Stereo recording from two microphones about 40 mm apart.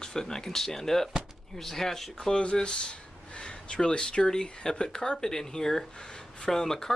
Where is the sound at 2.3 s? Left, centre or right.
Left.